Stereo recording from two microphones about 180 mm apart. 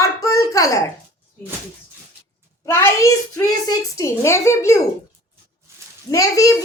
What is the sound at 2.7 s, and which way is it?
Speech, 15° left (ahead or behind).